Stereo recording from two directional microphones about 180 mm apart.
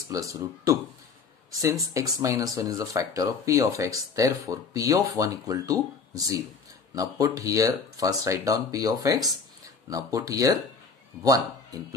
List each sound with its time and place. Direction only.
0.1 s speech: 20° right (ahead or behind)